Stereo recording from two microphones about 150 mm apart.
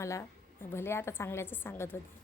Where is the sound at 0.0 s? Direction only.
20° left (ahead or behind).